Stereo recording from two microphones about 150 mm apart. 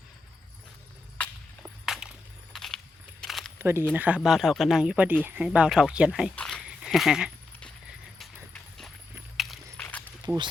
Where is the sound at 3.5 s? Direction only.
15° right (ahead or behind).